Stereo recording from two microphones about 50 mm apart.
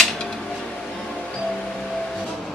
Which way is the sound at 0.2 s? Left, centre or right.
Centre.